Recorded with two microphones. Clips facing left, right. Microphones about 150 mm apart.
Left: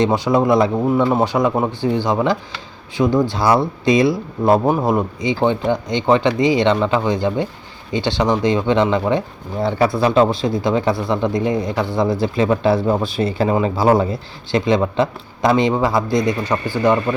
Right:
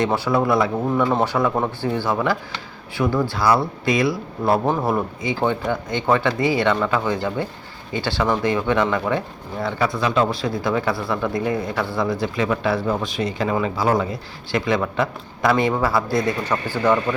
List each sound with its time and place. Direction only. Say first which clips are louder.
0.0 s speech: left 4 dB; 20° left (ahead or behind)